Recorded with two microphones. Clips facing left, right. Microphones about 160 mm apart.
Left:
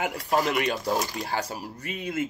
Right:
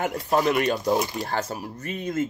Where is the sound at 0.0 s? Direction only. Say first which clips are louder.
Right 3 dB; 5° left (ahead or behind).